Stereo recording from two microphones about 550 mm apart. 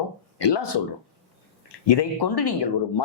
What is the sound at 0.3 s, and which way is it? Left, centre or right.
Speech, left.